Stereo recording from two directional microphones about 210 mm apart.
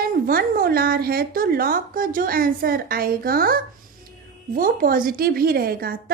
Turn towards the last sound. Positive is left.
turn(degrees=-45)  # may be behind; listen again after turning